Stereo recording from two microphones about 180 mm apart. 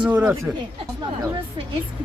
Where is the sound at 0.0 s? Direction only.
10° right (ahead or behind).